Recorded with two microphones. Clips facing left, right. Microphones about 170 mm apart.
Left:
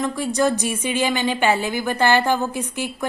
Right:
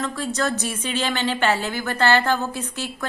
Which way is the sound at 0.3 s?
15° left (ahead or behind).